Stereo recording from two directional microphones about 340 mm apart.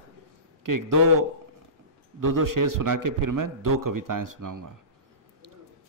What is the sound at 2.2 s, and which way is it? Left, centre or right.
A man's voice, right.